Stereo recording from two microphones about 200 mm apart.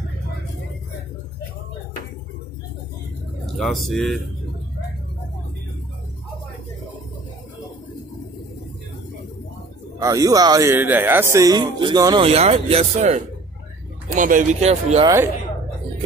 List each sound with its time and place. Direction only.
3.5 s speech: centre (ahead or behind)
9.9 s speech: 20° right (ahead or behind); by 15.0 s 35° right (ahead or behind)
15.0 s speech: 15° right (ahead or behind)